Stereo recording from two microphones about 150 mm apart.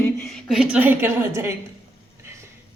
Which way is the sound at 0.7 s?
10° right (ahead or behind).